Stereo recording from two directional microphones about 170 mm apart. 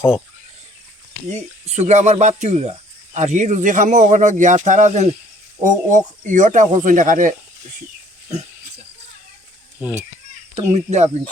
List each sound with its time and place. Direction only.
1.3 s speech: 40° right (ahead or behind)
9.8 s a child's voice: 10° right (ahead or behind)
10.5 s speech: 40° right (ahead or behind)